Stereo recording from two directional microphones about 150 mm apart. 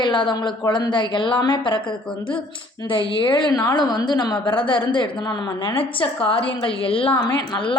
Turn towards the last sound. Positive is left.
turn(degrees=30)  # may be behind; listen again after turning